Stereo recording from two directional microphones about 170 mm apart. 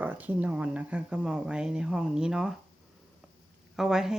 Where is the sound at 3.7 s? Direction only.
Centre (ahead or behind).